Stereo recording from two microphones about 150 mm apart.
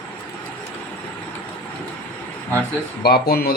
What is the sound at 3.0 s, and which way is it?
Speech, 90° left.